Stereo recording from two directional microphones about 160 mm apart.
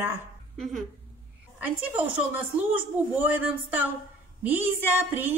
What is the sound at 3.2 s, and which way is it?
A woman's voice, 10° right (ahead or behind).